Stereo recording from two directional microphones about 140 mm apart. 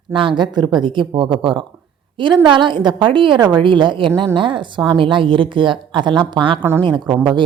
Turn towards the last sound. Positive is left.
turn(degrees=-30)  # may be behind; listen again after turning